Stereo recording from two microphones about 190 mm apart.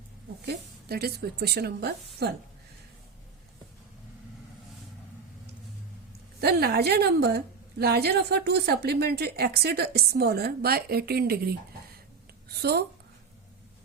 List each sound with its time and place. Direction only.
0.4 s a woman's voice: 55° right (ahead or behind)
6.4 s a woman's voice: 55° right (ahead or behind)